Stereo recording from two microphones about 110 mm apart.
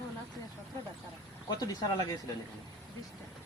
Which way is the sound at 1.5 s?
35° left (ahead or behind).